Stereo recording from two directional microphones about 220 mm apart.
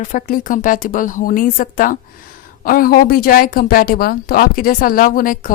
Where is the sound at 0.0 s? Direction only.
40° left (ahead or behind).